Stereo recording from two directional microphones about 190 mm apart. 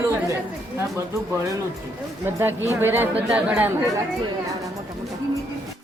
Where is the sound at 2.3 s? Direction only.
10° right (ahead or behind).